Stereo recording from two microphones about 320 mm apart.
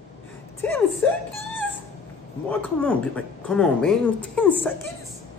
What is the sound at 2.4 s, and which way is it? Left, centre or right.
Speech, centre.